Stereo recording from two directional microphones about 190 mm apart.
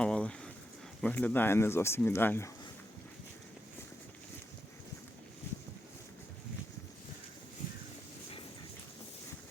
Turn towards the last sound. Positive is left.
turn(degrees=40)  # may be behind; listen again after turning